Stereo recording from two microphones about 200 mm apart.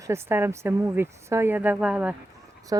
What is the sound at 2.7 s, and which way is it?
Speech, 20° right (ahead or behind).